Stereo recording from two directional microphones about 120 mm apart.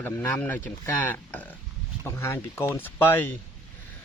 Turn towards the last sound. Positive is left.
turn(degrees=20)  # may be behind; listen again after turning